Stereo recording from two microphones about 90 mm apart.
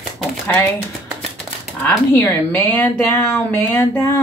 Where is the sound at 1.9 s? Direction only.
20° left (ahead or behind).